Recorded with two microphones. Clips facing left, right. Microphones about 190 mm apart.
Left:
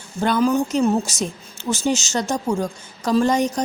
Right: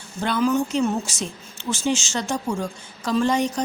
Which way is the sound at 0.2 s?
40° left (ahead or behind).